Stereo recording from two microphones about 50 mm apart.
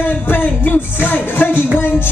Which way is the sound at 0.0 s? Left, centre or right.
Left.